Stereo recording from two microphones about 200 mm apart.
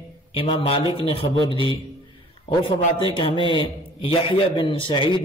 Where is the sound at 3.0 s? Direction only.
25° left (ahead or behind).